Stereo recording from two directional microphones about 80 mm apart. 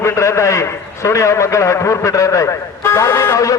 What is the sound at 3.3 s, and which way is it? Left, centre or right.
Music, left.